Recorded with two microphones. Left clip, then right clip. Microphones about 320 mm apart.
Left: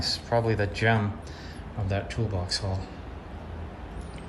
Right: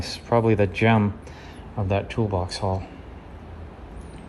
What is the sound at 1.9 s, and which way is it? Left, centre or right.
Speech, centre.